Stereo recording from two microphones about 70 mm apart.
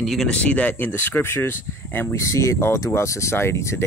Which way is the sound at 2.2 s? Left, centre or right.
Left.